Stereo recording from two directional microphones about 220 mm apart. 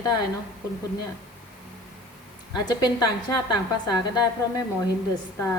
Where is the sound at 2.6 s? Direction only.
20° left (ahead or behind).